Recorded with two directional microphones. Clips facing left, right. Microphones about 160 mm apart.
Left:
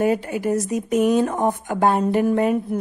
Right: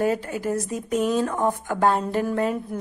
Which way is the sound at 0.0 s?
15° left (ahead or behind).